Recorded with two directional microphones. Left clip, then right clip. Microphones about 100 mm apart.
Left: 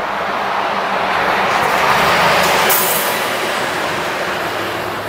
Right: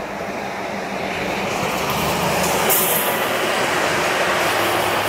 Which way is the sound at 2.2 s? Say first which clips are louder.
Left 6 dB; 50° left (ahead or behind).